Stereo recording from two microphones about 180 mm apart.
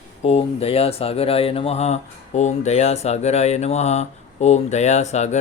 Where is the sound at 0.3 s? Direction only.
35° left (ahead or behind).